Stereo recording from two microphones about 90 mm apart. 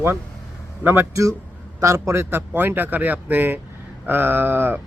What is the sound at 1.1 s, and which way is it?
A man's voice, 35° right (ahead or behind).